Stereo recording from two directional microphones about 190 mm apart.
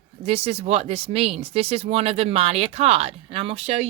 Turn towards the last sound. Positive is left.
turn(degrees=-30)  # may be behind; listen again after turning